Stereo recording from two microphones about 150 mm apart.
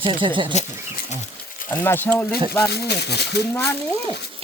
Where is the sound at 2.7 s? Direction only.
90° left.